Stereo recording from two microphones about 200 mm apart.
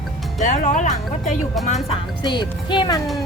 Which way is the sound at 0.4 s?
40° left (ahead or behind).